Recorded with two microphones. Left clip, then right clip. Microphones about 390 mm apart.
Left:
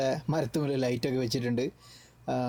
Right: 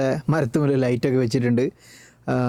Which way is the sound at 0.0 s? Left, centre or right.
Right.